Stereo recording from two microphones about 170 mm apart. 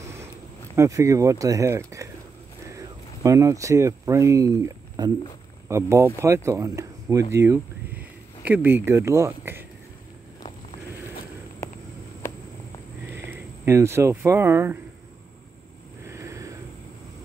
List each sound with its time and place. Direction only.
0.7 s speech: 20° right (ahead or behind)
13.1 s speech: 15° right (ahead or behind)
16.0 s vehicle: 15° right (ahead or behind)